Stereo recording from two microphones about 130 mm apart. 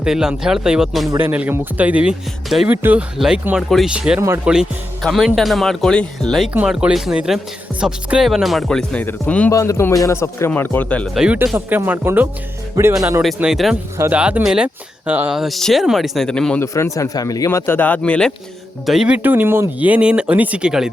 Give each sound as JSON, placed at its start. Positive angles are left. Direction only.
{"t": 0.0, "sound": "speech", "side_deg": -5}
{"t": 1.2, "sound": "speech", "side_deg": -15}
{"t": 2.7, "sound": "speech", "side_deg": -15}
{"t": 6.5, "sound": "speech", "side_deg": -10}
{"t": 9.5, "sound": "speech", "side_deg": 25}
{"t": 11.1, "sound": "speech", "side_deg": -5}
{"t": 11.5, "sound": "speech", "side_deg": -15}
{"t": 13.2, "sound": "speech", "side_deg": 0}
{"t": 15.4, "sound": "speech", "side_deg": 0}
{"t": 16.7, "sound": "speech", "side_deg": 25}
{"t": 18.9, "sound": "speech", "side_deg": -5}